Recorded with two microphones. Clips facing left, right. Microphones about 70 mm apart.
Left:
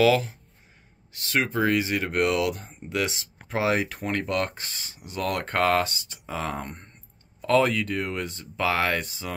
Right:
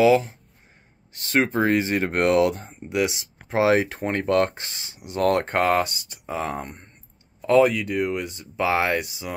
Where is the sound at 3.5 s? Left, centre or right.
Right.